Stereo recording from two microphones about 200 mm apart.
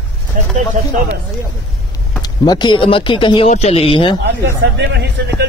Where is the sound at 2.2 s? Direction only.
20° left (ahead or behind).